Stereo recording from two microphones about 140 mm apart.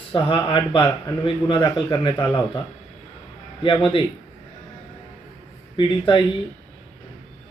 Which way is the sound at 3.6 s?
35° left (ahead or behind).